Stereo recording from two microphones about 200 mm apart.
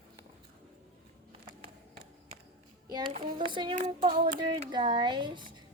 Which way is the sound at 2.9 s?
20° right (ahead or behind).